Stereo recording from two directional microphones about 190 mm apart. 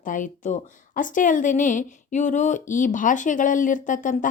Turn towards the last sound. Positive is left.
turn(degrees=45)  # may be behind; listen again after turning